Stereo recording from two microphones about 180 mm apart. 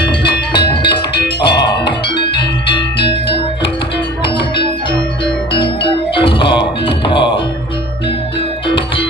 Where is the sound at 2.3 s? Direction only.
30° left (ahead or behind).